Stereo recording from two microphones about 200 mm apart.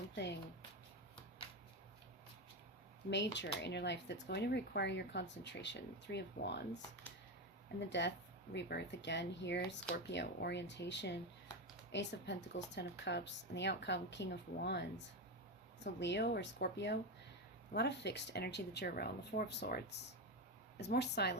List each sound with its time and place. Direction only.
3.1 s speech: 60° left (ahead or behind)
7.8 s speech: 60° left (ahead or behind)